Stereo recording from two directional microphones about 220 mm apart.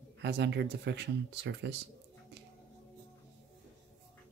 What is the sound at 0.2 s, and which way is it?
Speech, 50° right (ahead or behind).